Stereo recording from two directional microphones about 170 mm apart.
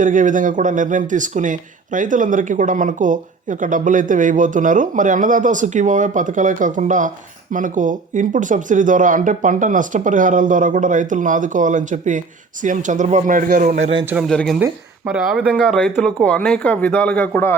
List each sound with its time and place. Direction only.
0.0 s speech: 50° right (ahead or behind)
14.0 s a man's voice: 10° right (ahead or behind)
14.3 s speech: centre (ahead or behind)